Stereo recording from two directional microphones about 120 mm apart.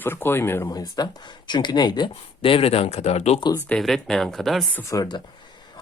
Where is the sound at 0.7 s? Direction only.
35° left (ahead or behind); by 3.4 s 65° left (ahead or behind).